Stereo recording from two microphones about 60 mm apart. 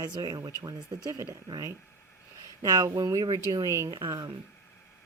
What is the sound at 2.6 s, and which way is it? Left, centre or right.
Speech, right.